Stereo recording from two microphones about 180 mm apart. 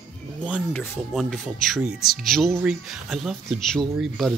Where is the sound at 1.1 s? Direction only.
Centre (ahead or behind).